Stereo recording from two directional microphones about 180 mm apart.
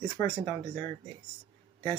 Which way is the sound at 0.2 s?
15° left (ahead or behind).